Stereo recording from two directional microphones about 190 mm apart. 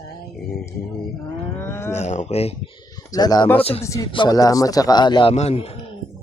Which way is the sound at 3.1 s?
20° left (ahead or behind).